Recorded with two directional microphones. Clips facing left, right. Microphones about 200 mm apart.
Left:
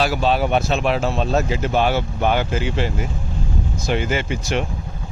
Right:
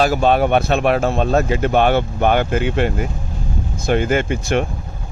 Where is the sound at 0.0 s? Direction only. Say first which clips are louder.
Right 4 dB; 50° right (ahead or behind).